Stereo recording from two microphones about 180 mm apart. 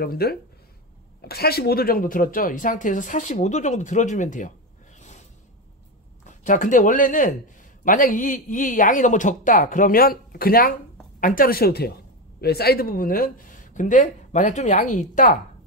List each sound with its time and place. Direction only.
0.0 s a woman's voice: 60° left (ahead or behind); by 5.2 s 40° left (ahead or behind)
6.2 s a woman's voice: 45° left (ahead or behind)